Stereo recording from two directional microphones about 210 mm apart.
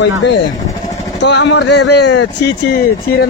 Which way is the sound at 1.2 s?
55° left (ahead or behind).